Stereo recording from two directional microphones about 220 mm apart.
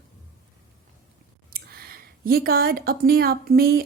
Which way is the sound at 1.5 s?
45° right (ahead or behind).